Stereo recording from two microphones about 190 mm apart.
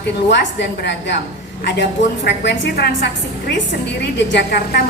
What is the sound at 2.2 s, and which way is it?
A woman's voice, 65° left (ahead or behind).